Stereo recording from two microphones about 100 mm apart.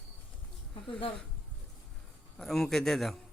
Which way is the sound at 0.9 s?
60° left (ahead or behind).